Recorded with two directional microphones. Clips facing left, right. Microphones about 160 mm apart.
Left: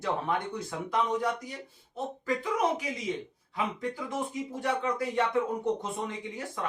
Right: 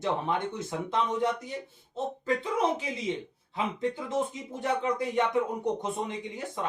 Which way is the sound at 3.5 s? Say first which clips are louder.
Right 2 dB; 25° right (ahead or behind).